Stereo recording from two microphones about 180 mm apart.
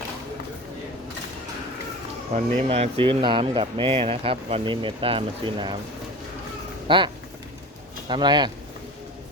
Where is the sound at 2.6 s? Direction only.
35° right (ahead or behind).